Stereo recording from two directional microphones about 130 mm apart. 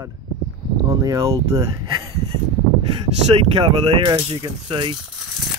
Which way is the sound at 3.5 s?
35° right (ahead or behind).